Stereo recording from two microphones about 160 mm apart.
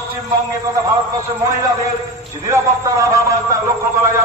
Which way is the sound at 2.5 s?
20° right (ahead or behind).